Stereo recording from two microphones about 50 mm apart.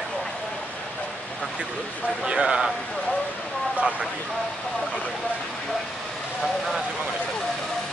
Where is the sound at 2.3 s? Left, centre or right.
Centre.